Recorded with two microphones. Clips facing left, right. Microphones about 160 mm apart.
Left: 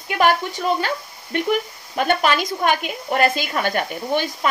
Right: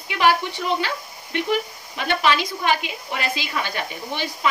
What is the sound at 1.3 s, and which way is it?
Speech, 45° left (ahead or behind).